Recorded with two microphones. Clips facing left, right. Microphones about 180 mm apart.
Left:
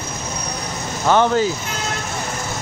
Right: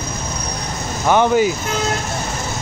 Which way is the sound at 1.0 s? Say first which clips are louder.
Right 2 dB; 15° right (ahead or behind).